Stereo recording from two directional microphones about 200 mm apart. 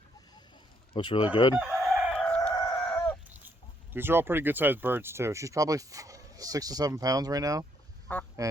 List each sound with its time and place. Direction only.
0.9 s speech: 25° left (ahead or behind)
1.5 s chicken: centre (ahead or behind)
3.9 s speech: 10° right (ahead or behind)
8.1 s speech: 10° left (ahead or behind)